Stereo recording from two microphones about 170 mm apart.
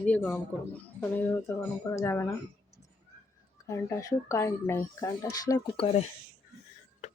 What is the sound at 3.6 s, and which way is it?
Speech, 20° left (ahead or behind).